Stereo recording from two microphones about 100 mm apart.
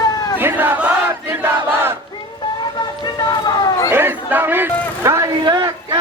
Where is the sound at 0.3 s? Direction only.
20° right (ahead or behind).